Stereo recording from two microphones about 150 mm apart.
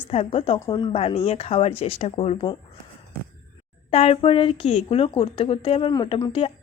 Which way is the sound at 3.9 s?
40° left (ahead or behind).